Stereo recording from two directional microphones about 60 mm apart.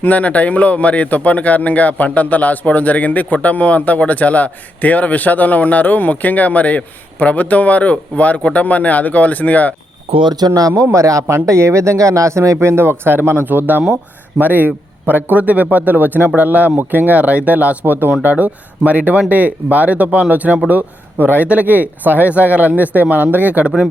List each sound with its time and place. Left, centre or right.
0.0 s speech: left
10.3 s speech: right
10.9 s speech: right
12.5 s a man's voice: right